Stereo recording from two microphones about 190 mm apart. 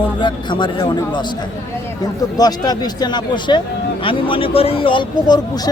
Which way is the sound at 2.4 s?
20° left (ahead or behind).